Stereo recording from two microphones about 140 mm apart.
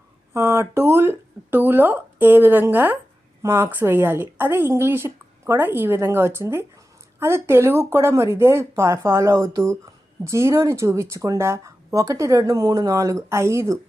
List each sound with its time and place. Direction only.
0.3 s a woman's voice: 15° right (ahead or behind)